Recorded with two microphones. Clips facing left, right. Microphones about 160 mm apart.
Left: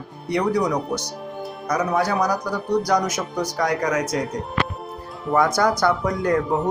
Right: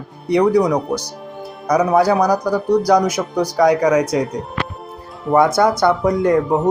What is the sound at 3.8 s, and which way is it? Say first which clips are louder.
Speech: right 8 dB; 35° right (ahead or behind).